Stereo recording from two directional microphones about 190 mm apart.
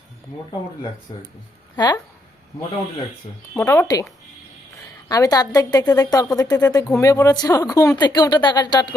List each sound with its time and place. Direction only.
1.1 s a woman's voice: 25° left (ahead or behind)
3.6 s a woman's voice: 15° left (ahead or behind)